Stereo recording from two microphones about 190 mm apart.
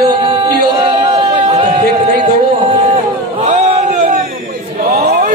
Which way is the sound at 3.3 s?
35° right (ahead or behind).